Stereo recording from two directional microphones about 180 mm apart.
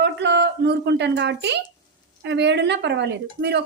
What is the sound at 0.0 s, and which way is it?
A woman's voice, 75° right (ahead or behind).